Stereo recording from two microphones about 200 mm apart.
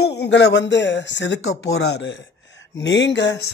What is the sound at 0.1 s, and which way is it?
Speech, 55° left (ahead or behind).